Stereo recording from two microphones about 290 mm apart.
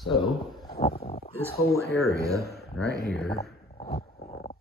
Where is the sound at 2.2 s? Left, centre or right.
Centre.